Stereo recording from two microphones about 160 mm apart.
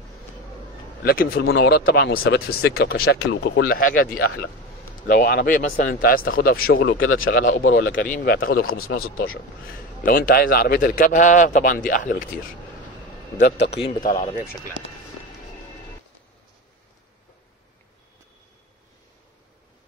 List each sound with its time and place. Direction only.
1.0 s speech: 70° left (ahead or behind)
13.4 s a man's voice: 90° left